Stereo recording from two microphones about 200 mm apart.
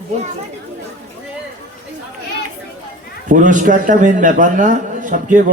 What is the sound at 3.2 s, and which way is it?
A man's voice, 40° right (ahead or behind).